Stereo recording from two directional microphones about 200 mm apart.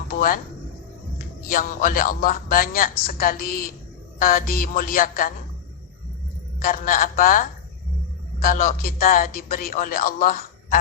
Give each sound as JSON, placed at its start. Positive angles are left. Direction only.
{"t": 0.1, "sound": "a sound", "side_deg": 45}
{"t": 1.5, "sound": "a man's voice", "side_deg": 45}
{"t": 6.6, "sound": "a man's voice", "side_deg": 45}